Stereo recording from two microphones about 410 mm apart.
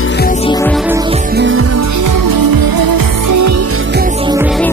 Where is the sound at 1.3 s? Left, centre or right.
Right.